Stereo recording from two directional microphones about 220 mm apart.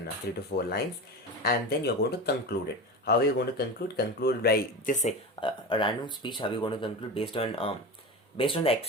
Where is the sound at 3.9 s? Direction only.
45° left (ahead or behind).